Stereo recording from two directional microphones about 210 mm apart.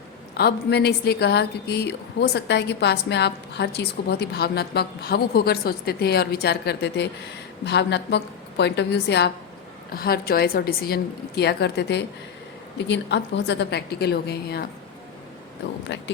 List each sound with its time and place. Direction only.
0.3 s a woman's voice: 50° left (ahead or behind)